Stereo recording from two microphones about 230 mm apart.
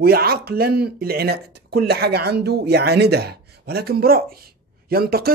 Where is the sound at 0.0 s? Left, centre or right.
Right.